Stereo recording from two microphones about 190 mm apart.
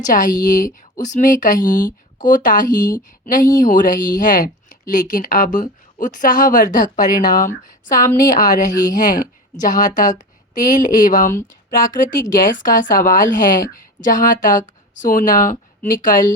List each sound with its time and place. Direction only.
0.0 s speech: 45° left (ahead or behind)